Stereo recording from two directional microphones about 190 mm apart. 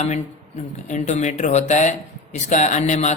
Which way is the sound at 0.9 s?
40° left (ahead or behind).